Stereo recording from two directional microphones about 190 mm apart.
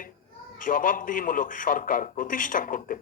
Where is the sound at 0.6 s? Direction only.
45° left (ahead or behind).